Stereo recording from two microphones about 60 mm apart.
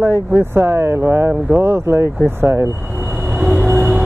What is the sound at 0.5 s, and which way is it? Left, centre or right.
Speech, right.